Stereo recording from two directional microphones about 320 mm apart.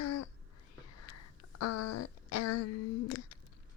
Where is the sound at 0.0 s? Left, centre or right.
Left.